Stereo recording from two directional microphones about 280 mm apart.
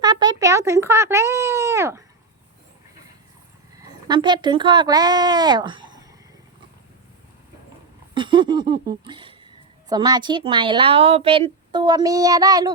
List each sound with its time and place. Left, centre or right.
0.0 s a sound: centre
4.1 s a woman's voice: centre
8.1 s a woman's voice: centre